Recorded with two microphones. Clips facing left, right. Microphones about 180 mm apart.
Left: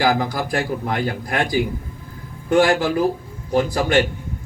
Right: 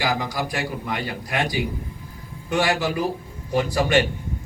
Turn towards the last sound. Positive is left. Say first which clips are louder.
# left 2 dB
turn(degrees=50)  # may be behind; listen again after turning